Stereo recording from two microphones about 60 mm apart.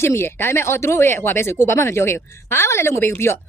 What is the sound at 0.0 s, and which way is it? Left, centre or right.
A woman's voice, left.